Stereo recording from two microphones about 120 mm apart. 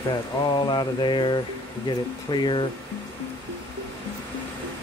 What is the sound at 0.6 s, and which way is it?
Speech, 40° left (ahead or behind).